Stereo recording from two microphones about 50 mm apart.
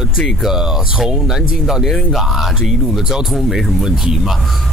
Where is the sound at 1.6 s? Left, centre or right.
Centre.